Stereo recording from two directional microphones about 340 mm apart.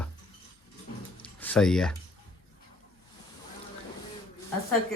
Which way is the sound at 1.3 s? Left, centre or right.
Centre.